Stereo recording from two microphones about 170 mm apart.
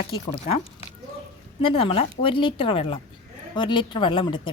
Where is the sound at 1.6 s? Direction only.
30° left (ahead or behind).